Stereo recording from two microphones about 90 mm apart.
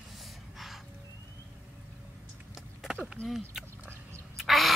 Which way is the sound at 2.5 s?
Centre (ahead or behind).